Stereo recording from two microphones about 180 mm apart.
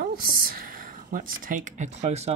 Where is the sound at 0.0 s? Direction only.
55° right (ahead or behind).